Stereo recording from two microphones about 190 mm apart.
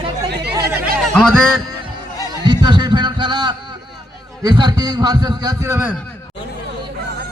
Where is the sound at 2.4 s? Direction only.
20° right (ahead or behind).